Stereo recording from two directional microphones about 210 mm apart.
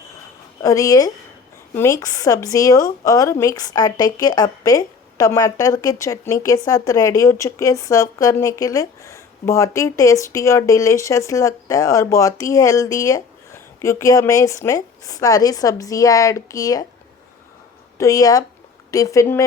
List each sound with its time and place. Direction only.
0.6 s a woman's voice: 15° left (ahead or behind)
17.9 s a woman's voice: 15° left (ahead or behind)